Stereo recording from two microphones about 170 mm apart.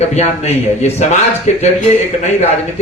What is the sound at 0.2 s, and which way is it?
Speech, 40° left (ahead or behind).